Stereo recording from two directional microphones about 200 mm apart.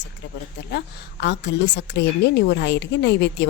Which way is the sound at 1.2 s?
60° left (ahead or behind).